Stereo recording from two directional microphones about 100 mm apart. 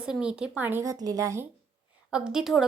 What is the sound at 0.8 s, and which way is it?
Speech, 35° right (ahead or behind).